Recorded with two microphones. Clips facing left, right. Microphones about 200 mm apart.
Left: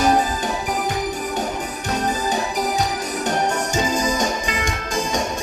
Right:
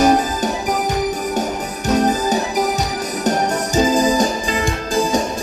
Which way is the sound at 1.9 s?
40° right (ahead or behind).